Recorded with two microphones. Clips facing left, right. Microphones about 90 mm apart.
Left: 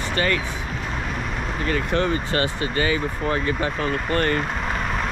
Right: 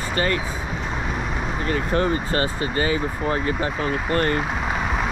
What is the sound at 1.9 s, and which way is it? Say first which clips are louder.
Speech: right 1 dB; 30° right (ahead or behind).